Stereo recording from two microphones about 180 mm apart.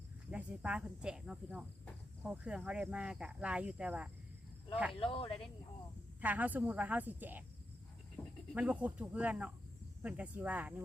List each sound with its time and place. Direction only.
0.3 s speech: 5° right (ahead or behind)
4.9 s speech: 30° left (ahead or behind)
6.2 s speech: 10° right (ahead or behind)
8.2 s insect: 5° left (ahead or behind)
8.5 s speech: 5° right (ahead or behind)